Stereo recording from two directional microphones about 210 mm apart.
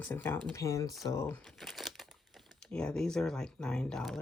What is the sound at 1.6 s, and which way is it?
Crumpling, centre (ahead or behind).